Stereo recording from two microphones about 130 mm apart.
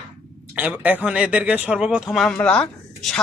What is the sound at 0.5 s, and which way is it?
A man's voice, 10° right (ahead or behind).